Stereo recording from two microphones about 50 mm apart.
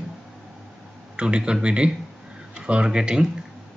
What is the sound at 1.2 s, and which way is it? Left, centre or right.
Speech, centre.